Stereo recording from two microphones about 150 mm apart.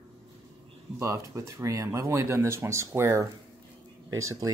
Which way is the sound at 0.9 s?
20° right (ahead or behind).